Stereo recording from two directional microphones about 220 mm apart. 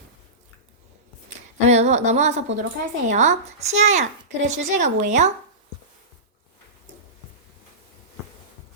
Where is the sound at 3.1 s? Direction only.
35° right (ahead or behind).